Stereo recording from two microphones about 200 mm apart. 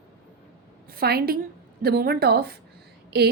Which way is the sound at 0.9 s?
50° right (ahead or behind).